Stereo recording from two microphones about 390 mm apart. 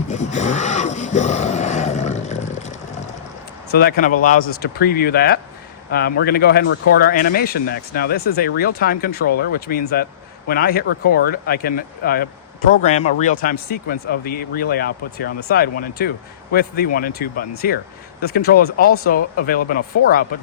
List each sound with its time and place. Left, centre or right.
0.1 s vehicle: centre
3.7 s speech: left